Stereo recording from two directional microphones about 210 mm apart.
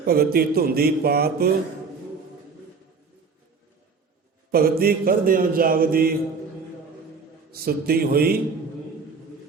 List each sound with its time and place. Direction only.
0.0 s mantra: 45° right (ahead or behind)
4.5 s mantra: 45° right (ahead or behind)
7.5 s mantra: 45° right (ahead or behind)